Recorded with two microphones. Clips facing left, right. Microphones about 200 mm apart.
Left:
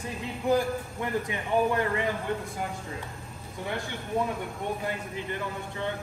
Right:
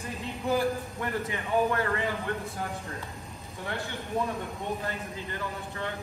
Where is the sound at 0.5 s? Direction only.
15° left (ahead or behind).